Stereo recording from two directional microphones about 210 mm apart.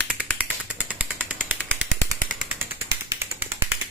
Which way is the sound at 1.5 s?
10° right (ahead or behind).